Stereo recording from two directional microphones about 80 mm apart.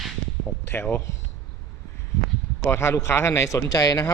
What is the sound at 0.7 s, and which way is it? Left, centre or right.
Speech, left.